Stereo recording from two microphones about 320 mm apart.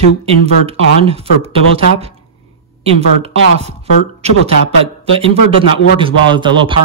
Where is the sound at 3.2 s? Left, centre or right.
Centre.